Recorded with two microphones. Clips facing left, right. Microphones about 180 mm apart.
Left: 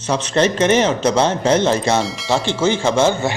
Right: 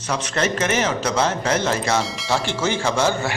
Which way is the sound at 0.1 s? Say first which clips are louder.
Left 6 dB; 30° left (ahead or behind).